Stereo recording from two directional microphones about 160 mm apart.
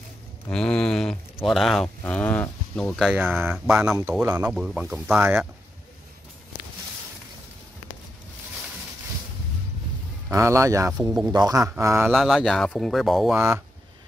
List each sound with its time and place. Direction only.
0.5 s speech: 5° left (ahead or behind)
3.1 s speech: 5° right (ahead or behind)
10.3 s speech: 20° right (ahead or behind)
12.1 s speech: centre (ahead or behind)